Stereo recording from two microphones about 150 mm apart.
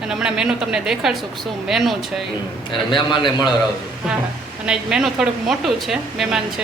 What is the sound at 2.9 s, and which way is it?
Speech, 30° left (ahead or behind).